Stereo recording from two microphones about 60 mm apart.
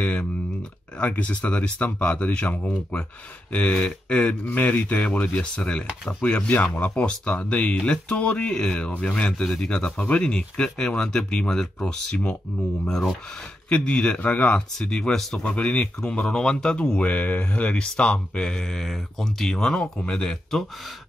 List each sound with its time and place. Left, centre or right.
0.0 s speech: centre
4.5 s a man's voice: left; by 12.2 s centre
13.7 s a man's voice: centre